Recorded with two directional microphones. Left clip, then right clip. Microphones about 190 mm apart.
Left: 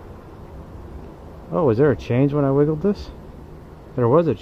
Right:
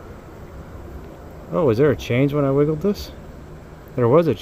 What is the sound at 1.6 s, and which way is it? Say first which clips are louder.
Speech: even; 5° left (ahead or behind).